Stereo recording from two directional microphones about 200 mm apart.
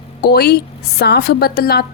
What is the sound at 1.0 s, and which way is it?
Speech, 55° left (ahead or behind).